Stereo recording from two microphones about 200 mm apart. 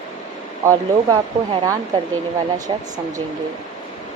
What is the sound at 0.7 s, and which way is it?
Speech, 20° right (ahead or behind).